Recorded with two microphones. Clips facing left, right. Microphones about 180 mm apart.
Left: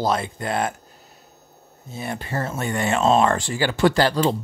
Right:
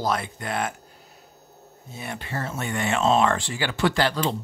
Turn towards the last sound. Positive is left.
turn(degrees=35)  # may be behind; listen again after turning